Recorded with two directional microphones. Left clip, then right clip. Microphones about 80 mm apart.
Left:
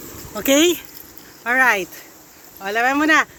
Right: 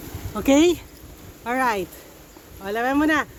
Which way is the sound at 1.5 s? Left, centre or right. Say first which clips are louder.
Left 6 dB; centre.